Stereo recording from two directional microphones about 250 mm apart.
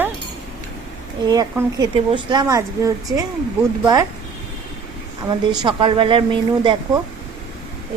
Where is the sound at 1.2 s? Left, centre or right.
Centre.